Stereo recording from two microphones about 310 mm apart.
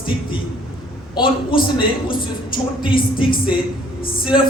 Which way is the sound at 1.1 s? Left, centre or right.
Centre.